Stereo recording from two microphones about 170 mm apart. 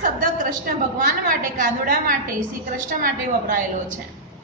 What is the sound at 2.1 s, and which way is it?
A woman's voice, 50° right (ahead or behind).